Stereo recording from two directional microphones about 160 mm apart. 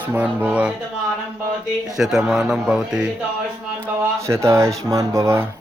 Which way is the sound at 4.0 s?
15° right (ahead or behind).